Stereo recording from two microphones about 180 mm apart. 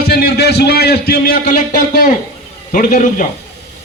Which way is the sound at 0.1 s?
65° left (ahead or behind).